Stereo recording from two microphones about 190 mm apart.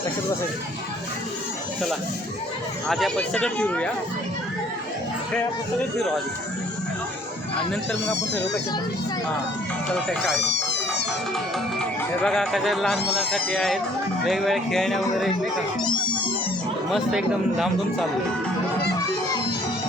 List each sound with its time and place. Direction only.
2.8 s speech: centre (ahead or behind)
8.1 s speech: 65° left (ahead or behind)
10.2 s cat: 65° left (ahead or behind)
12.2 s speech: centre (ahead or behind)
16.9 s speech: centre (ahead or behind)